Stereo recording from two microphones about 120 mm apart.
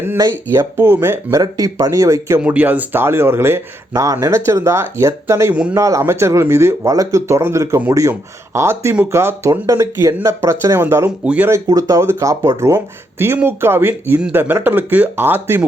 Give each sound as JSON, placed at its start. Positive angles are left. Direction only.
{"t": 0.2, "sound": "speech", "side_deg": -25}
{"t": 2.4, "sound": "speech", "side_deg": -15}
{"t": 11.5, "sound": "speech", "side_deg": -30}